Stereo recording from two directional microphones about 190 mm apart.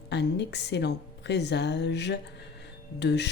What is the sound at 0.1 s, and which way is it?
Speech, 65° left (ahead or behind).